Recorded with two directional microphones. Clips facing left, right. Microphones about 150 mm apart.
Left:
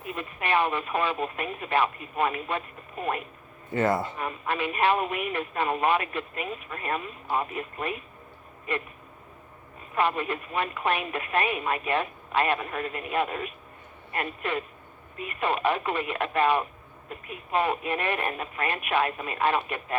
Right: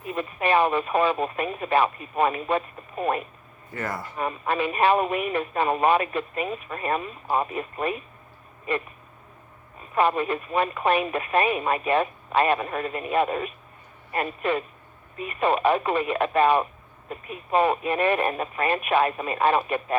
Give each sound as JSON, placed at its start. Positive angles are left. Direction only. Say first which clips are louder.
{"t": 0.1, "sound": "speech", "louder": "right 5 dB", "side_deg": -40}
{"t": 3.7, "sound": "speech", "louder": "left 7 dB", "side_deg": 25}
{"t": 4.2, "sound": "speech", "louder": "right 4 dB", "side_deg": -35}
{"t": 10.0, "sound": "speech", "louder": "right 4 dB", "side_deg": -35}
{"t": 15.4, "sound": "speech", "louder": "right 5 dB", "side_deg": -40}